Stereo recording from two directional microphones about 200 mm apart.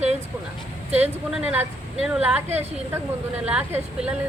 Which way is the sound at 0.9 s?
35° right (ahead or behind).